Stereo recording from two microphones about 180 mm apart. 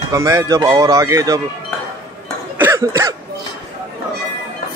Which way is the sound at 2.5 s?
15° right (ahead or behind).